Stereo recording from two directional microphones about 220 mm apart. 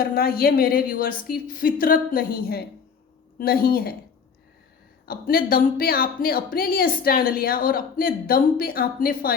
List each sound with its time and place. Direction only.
0.0 s a woman's voice: 45° left (ahead or behind)
5.0 s speech: 40° left (ahead or behind)